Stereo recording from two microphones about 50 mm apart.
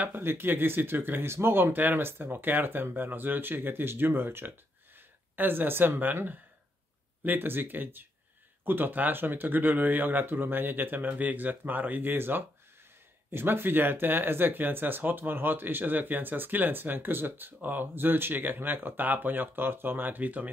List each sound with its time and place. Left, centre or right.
0.1 s speech: right
7.2 s speech: right